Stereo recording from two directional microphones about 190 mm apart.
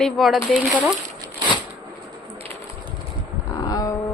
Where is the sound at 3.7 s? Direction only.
20° left (ahead or behind).